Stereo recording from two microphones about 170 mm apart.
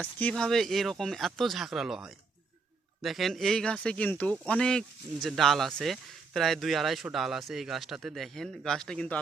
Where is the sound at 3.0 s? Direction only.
Centre (ahead or behind).